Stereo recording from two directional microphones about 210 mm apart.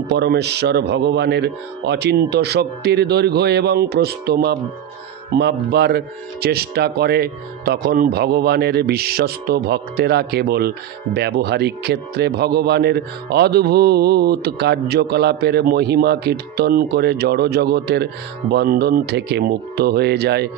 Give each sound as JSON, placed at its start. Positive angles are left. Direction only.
{"t": 0.1, "sound": "a man's voice", "side_deg": -50}